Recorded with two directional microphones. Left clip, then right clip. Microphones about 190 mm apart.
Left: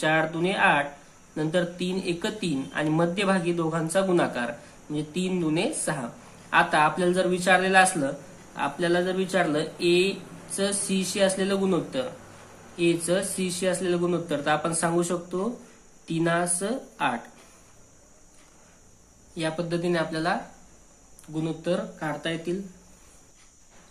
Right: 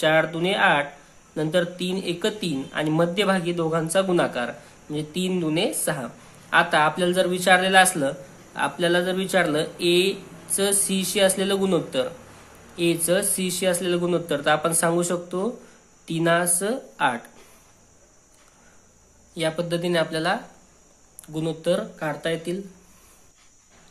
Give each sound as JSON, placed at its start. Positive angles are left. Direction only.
{"t": 0.0, "sound": "speech", "side_deg": -25}
{"t": 19.3, "sound": "speech", "side_deg": -25}